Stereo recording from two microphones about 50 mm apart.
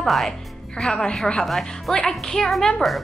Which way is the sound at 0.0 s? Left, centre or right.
Centre.